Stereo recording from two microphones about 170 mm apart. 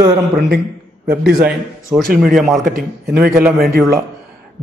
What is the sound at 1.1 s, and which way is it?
Speech, 5° right (ahead or behind).